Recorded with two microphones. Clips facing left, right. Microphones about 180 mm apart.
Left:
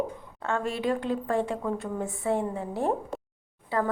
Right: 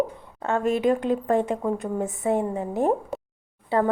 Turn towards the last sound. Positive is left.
turn(degrees=-25)  # may be behind; listen again after turning